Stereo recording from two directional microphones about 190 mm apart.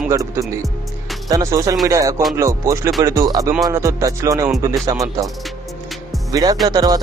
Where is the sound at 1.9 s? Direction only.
15° right (ahead or behind).